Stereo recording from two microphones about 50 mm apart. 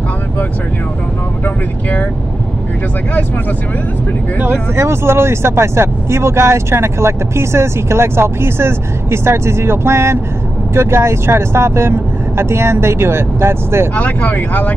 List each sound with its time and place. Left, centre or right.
1.4 s speech: left
4.7 s speech: right
13.9 s speech: left